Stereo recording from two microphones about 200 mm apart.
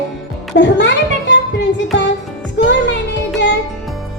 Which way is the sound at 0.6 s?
60° left (ahead or behind).